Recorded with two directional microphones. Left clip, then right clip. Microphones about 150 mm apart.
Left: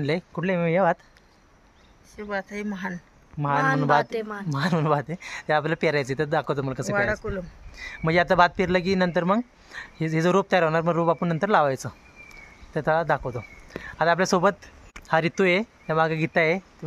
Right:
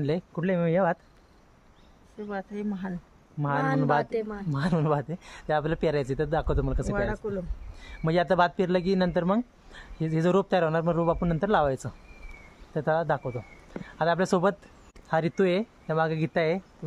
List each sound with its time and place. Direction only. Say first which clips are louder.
0.0 s a man's voice: left 3 dB; 15° left (ahead or behind)
2.1 s speech: left 5 dB; 35° right (ahead or behind)
2.5 s speech: left 3 dB; 45° right (ahead or behind)
3.3 s a man's voice: left 4 dB; 15° left (ahead or behind)
4.1 s speech: left 1 dB; 5° right (ahead or behind)
4.6 s a man's voice: left 4 dB; 15° left (ahead or behind)
7.2 s speech: left 1 dB; 35° right (ahead or behind)
7.8 s a man's voice: left 4 dB; 10° left (ahead or behind)